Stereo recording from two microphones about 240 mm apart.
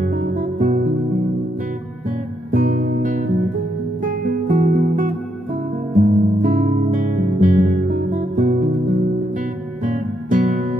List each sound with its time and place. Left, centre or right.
0.6 s music: right
2.5 s music: right
9.8 s music: right